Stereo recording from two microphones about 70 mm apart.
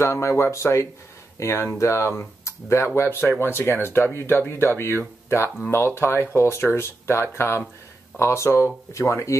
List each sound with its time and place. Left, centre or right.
0.0 s speech: left